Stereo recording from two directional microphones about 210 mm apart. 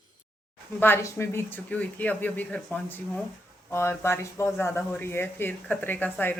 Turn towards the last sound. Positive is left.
turn(degrees=10)  # may be behind; listen again after turning